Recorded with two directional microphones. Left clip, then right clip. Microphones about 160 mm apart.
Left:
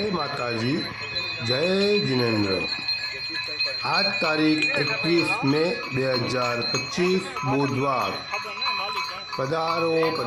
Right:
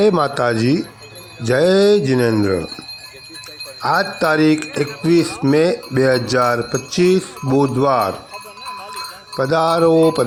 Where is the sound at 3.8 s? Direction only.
40° right (ahead or behind).